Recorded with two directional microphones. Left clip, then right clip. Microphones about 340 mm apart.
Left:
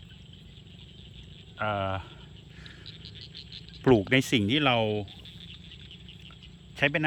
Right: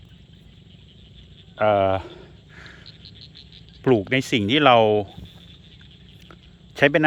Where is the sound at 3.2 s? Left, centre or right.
Left.